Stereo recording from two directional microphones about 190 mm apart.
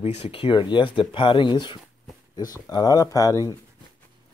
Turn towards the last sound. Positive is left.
turn(degrees=20)  # may be behind; listen again after turning